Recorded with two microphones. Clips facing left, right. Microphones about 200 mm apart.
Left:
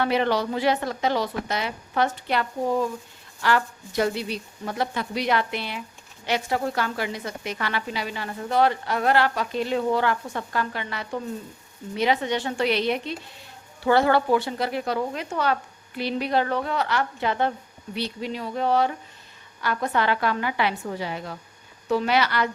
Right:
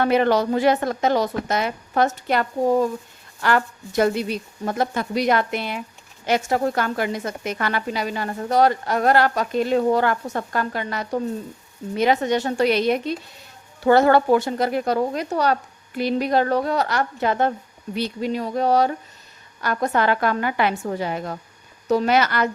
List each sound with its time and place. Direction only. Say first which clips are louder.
0.0 s speech: right 5 dB; 50° right (ahead or behind)